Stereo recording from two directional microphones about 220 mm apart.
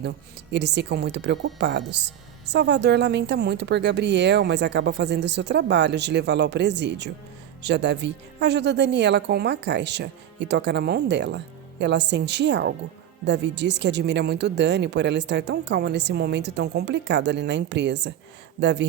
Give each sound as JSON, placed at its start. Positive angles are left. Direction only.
{"t": 0.5, "sound": "speech", "side_deg": -50}